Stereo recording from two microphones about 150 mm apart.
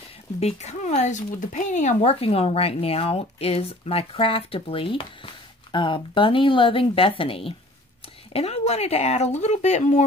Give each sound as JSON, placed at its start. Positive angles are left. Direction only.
{"t": 0.4, "sound": "speech", "side_deg": 45}